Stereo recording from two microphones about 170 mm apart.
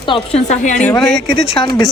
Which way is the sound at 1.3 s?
30° left (ahead or behind).